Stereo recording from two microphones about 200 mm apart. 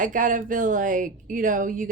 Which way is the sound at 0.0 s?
40° right (ahead or behind).